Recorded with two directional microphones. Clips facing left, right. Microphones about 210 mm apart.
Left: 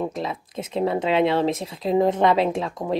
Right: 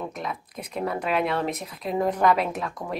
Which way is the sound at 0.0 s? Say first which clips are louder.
Left 5 dB; 25° left (ahead or behind).